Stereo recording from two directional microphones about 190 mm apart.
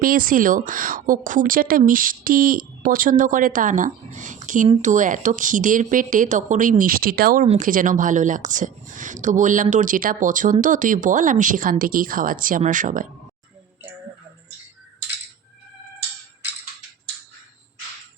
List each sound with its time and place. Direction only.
0.0 s a woman's voice: 50° right (ahead or behind)
7.4 s a woman's voice: 40° right (ahead or behind)